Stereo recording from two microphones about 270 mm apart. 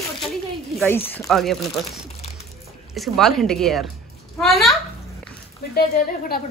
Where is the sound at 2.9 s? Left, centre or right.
Centre.